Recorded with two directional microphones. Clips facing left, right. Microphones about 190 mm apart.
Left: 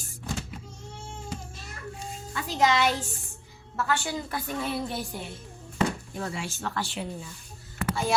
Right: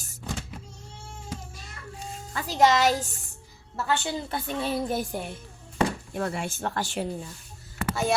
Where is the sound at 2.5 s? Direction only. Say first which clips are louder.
Right 3 dB; 40° right (ahead or behind).